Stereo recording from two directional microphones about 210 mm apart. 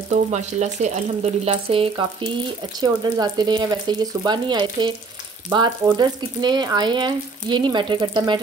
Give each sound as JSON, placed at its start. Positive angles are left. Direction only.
{"t": 0.1, "sound": "speech", "side_deg": -35}